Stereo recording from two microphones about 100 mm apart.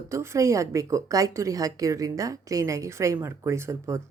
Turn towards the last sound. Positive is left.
turn(degrees=-30)  # may be behind; listen again after turning